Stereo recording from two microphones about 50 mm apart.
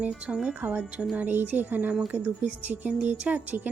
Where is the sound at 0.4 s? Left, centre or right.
Right.